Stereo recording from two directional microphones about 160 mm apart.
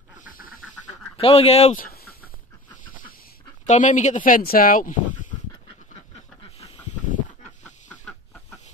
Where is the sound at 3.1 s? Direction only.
65° left (ahead or behind).